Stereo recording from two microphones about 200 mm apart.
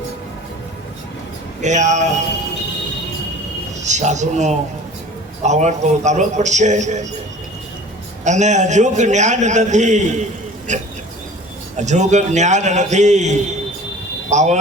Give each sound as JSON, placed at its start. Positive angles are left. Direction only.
{"t": 1.6, "sound": "a man's voice", "side_deg": -35}
{"t": 3.8, "sound": "a man's voice", "side_deg": -35}
{"t": 8.2, "sound": "a man's voice", "side_deg": -35}